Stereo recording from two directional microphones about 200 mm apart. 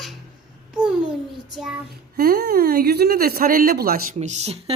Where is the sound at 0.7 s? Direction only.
5° right (ahead or behind).